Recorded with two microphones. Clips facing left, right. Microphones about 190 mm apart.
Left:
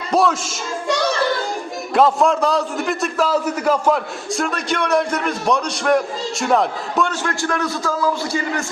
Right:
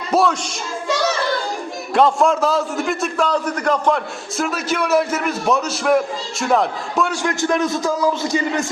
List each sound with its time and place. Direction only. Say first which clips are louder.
0.1 s child singing: even; centre (ahead or behind)
1.9 s a man's voice: even; centre (ahead or behind)
7.1 s a man's voice: right 3 dB; 15° right (ahead or behind)